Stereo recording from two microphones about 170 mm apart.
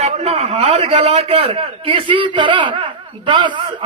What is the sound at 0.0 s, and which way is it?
A man's voice, 40° right (ahead or behind).